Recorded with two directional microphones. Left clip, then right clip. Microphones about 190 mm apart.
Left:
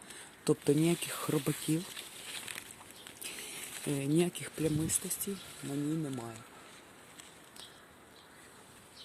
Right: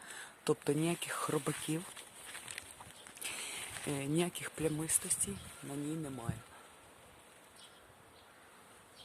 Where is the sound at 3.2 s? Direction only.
15° right (ahead or behind).